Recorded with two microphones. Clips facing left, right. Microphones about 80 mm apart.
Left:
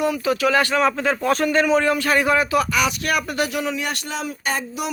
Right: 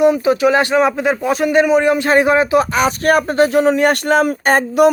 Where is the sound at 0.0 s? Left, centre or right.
Right.